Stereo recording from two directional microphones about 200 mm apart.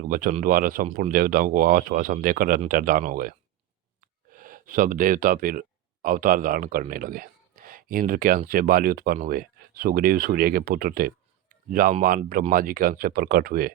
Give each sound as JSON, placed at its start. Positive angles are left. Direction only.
{"t": 0.1, "sound": "speech", "side_deg": -40}